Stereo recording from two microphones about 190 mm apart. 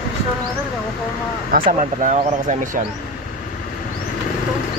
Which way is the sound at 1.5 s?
45° right (ahead or behind).